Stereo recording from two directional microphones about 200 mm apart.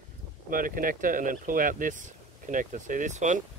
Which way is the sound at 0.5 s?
45° right (ahead or behind).